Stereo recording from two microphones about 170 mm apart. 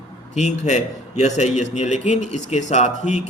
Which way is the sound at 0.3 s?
45° left (ahead or behind).